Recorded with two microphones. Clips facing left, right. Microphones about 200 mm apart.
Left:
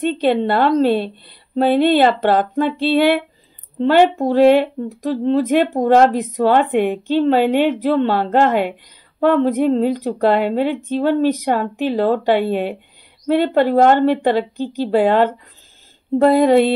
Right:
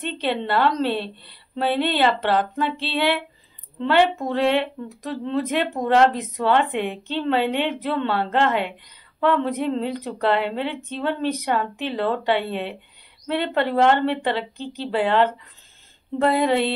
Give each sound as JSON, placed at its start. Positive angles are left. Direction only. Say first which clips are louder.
{"t": 0.0, "sound": "a woman's voice", "louder": "left 9 dB", "side_deg": 45}